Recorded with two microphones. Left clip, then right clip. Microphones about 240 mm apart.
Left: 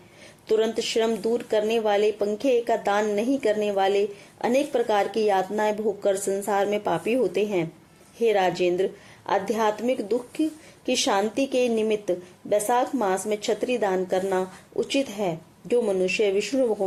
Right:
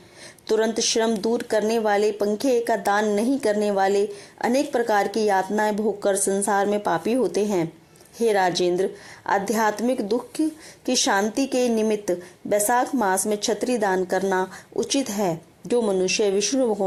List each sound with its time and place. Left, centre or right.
0.4 s a woman's voice: centre
8.2 s a woman's voice: centre